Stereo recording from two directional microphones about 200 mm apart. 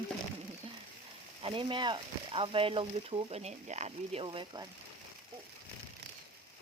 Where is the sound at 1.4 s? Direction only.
25° right (ahead or behind).